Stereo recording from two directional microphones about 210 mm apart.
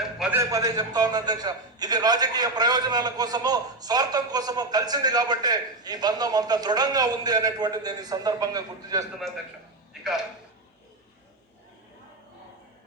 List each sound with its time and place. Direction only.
0.2 s a man's voice: 10° right (ahead or behind)